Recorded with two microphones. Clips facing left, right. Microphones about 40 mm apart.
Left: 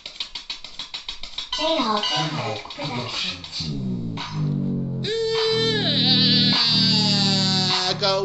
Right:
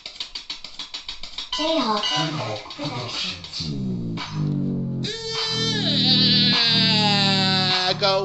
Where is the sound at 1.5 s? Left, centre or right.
Left.